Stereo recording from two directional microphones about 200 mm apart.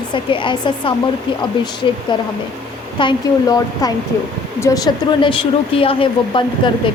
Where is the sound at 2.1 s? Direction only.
20° left (ahead or behind).